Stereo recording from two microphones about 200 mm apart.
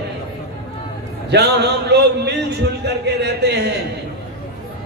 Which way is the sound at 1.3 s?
55° right (ahead or behind).